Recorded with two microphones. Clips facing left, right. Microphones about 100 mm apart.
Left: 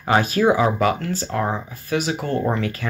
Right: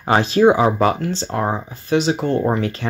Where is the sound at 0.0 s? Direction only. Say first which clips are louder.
Right 4 dB; 25° right (ahead or behind).